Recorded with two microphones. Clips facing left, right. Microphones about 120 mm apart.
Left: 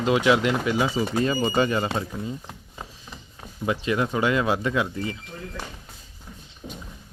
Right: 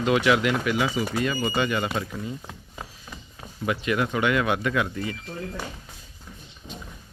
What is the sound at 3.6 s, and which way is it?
Speech, 25° left (ahead or behind).